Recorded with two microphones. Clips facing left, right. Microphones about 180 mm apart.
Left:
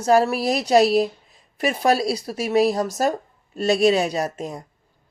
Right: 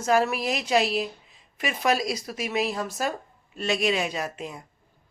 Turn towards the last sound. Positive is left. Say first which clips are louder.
# left 6 dB
turn(degrees=40)  # may be behind; listen again after turning